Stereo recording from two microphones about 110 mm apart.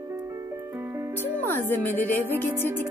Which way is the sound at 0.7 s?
20° right (ahead or behind).